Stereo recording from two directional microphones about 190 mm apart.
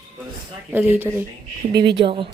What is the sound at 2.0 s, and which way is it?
Speech, 30° right (ahead or behind).